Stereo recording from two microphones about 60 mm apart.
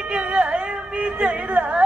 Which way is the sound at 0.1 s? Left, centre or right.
Centre.